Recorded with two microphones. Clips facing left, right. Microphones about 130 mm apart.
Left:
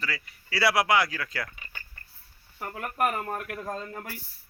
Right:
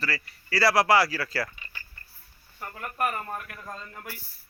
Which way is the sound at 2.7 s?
65° left (ahead or behind).